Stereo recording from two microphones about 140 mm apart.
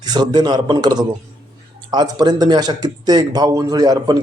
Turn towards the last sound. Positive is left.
turn(degrees=-30)  # may be behind; listen again after turning